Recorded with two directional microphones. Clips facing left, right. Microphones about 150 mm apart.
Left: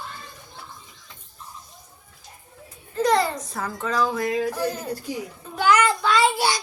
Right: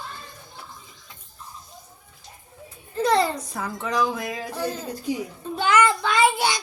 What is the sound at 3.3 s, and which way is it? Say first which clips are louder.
Speech: even; 15° right (ahead or behind).